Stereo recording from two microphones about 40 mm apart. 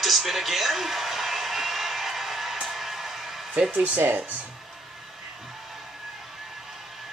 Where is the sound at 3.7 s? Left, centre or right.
Right.